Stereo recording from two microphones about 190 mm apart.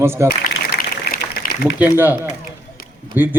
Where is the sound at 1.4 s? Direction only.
60° left (ahead or behind).